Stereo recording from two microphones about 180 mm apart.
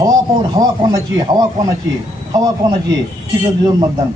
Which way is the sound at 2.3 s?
20° right (ahead or behind).